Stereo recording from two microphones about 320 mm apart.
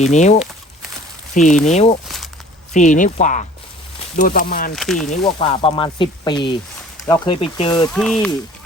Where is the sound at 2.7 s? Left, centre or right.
Left.